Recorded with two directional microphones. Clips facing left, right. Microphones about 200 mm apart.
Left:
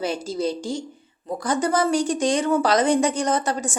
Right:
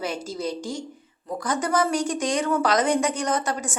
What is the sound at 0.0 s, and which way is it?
A woman's voice, 30° left (ahead or behind).